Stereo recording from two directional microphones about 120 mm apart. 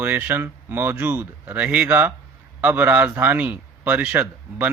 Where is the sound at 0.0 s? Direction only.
15° right (ahead or behind).